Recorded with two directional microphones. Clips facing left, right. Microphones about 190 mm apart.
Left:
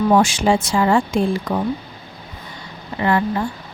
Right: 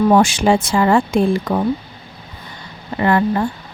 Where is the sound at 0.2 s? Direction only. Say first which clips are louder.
Right 2 dB; 60° right (ahead or behind).